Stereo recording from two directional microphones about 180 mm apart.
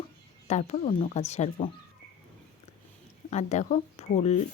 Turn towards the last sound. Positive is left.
turn(degrees=40)  # may be behind; listen again after turning